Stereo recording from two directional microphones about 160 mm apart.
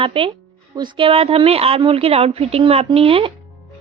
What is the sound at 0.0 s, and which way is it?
A woman's voice, 35° right (ahead or behind).